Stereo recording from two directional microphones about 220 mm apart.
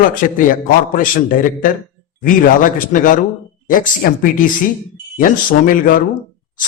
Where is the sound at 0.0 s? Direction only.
40° left (ahead or behind).